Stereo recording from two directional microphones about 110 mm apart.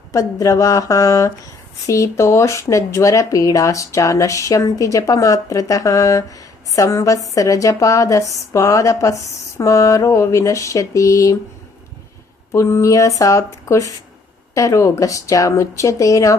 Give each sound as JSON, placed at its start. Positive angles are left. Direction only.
{"t": 0.1, "sound": "speech", "side_deg": 30}
{"t": 12.5, "sound": "speech", "side_deg": 25}